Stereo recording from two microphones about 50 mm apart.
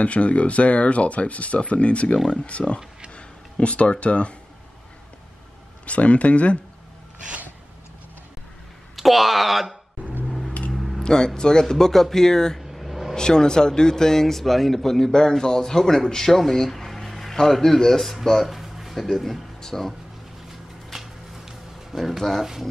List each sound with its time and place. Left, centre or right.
0.0 s speech: left
5.9 s speech: left
8.9 s speech: centre
10.2 s a sound: centre
11.0 s a man's voice: centre
12.7 s vehicle: centre
13.1 s a man's voice: centre
20.9 s a sound: centre
22.4 s speech: centre